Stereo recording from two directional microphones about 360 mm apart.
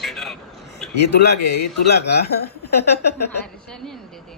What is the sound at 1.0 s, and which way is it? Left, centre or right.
A woman's voice, left.